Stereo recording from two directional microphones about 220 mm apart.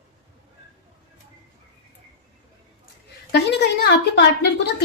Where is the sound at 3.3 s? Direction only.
50° left (ahead or behind).